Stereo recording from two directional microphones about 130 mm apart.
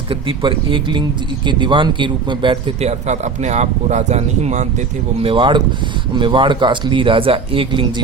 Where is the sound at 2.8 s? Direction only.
60° right (ahead or behind).